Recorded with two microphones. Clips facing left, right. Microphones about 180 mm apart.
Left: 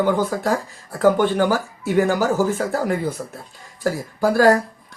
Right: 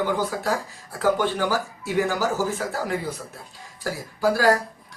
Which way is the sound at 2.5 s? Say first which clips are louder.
Left 5 dB; 50° left (ahead or behind).